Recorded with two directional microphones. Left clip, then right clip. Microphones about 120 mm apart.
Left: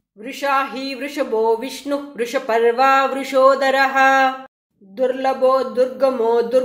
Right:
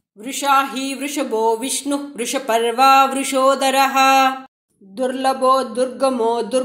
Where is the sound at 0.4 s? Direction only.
30° right (ahead or behind).